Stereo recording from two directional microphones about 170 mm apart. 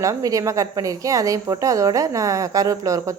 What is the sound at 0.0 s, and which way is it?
A woman's voice, 20° right (ahead or behind).